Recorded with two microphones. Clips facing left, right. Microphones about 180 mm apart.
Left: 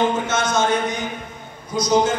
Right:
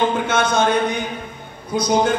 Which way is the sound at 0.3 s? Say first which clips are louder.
Right 2 dB; 60° right (ahead or behind).